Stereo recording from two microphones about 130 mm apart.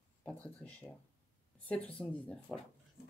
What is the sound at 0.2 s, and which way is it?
Speech, 10° left (ahead or behind).